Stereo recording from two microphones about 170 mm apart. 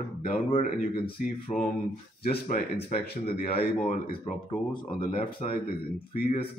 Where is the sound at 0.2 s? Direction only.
55° left (ahead or behind).